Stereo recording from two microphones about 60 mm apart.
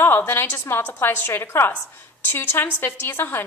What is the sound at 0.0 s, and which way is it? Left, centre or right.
A woman's voice, left.